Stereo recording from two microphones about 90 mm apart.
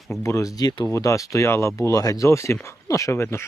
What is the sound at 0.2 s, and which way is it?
Speech, 35° left (ahead or behind).